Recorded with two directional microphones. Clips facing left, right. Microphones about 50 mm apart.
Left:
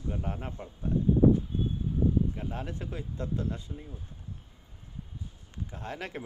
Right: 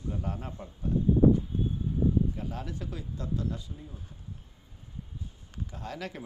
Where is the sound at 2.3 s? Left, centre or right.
Left.